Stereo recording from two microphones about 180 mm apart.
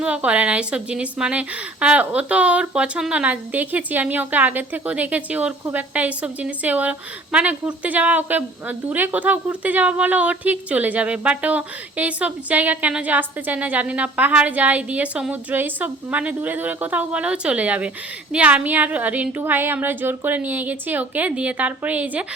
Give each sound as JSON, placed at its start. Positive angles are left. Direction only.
{"t": 0.0, "sound": "a woman's voice", "side_deg": -5}